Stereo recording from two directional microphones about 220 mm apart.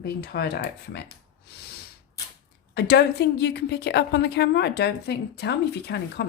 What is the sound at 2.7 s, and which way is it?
Speech, 50° left (ahead or behind).